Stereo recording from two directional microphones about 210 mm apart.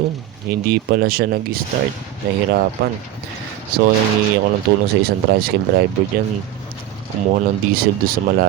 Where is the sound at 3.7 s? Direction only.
45° right (ahead or behind).